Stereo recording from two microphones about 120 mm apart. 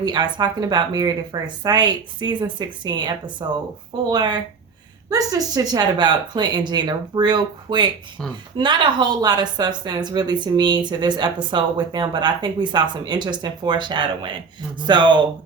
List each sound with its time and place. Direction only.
0.0 s a woman's voice: 35° right (ahead or behind)